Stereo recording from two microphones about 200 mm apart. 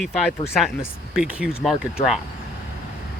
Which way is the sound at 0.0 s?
5° right (ahead or behind).